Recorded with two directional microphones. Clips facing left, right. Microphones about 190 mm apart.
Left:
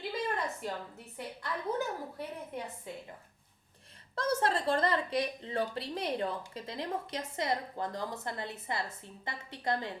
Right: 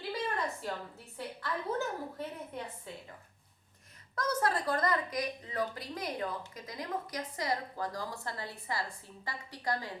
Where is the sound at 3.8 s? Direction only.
30° left (ahead or behind).